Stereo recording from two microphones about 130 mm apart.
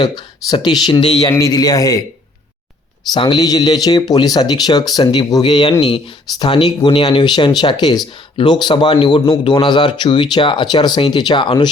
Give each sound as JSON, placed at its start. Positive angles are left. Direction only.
{"t": 0.0, "sound": "speech", "side_deg": 35}
{"t": 1.3, "sound": "a man's voice", "side_deg": 25}
{"t": 3.1, "sound": "speech", "side_deg": 35}